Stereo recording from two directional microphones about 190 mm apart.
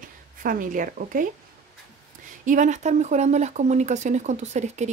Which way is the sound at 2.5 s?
40° right (ahead or behind).